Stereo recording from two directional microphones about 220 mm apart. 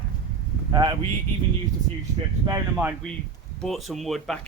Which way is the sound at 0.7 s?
20° right (ahead or behind).